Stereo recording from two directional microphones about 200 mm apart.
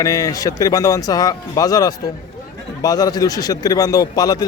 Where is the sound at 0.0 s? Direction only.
15° left (ahead or behind).